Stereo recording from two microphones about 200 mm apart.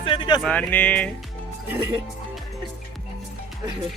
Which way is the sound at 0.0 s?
25° left (ahead or behind).